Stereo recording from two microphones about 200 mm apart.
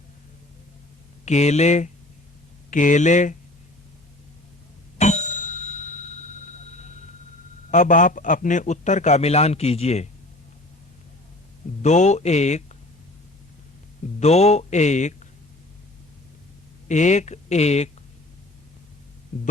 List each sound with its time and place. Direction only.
1.2 s a man's voice: 35° left (ahead or behind)
4.9 s bicycle bell: 35° left (ahead or behind)
7.7 s a man's voice: 40° left (ahead or behind)
11.8 s a man's voice: 35° left (ahead or behind)
14.2 s speech: 35° left (ahead or behind)
16.9 s a man's voice: 35° left (ahead or behind)